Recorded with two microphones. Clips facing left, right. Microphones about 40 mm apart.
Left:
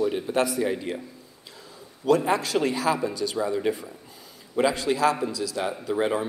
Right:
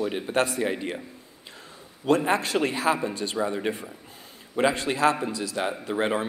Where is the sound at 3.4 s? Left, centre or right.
Right.